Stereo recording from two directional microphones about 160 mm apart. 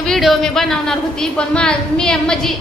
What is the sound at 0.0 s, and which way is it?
A woman's voice, centre (ahead or behind).